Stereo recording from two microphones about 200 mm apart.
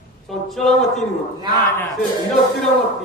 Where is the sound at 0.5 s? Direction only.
Centre (ahead or behind).